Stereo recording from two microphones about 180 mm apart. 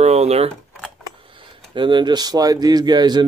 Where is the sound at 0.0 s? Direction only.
35° right (ahead or behind).